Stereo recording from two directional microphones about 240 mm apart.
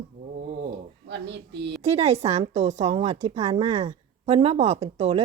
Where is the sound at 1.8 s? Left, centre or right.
Right.